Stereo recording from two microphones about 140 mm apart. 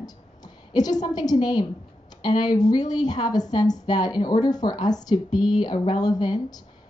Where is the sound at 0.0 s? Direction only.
30° left (ahead or behind).